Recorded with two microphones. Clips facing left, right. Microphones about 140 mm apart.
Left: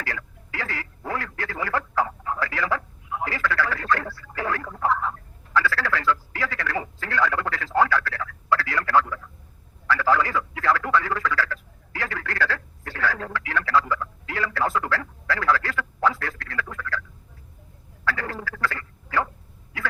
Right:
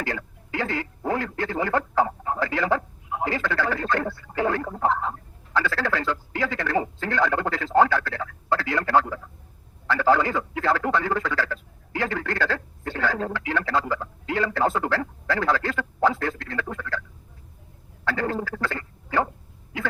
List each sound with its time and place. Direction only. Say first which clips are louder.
0.0 s a man's voice: right 4 dB; 20° right (ahead or behind)
18.0 s a man's voice: right 3 dB; 25° right (ahead or behind)